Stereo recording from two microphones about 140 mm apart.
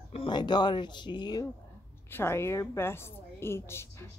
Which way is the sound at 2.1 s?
15° left (ahead or behind).